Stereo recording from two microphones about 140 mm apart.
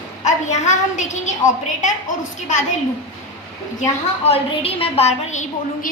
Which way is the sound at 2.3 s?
60° left (ahead or behind).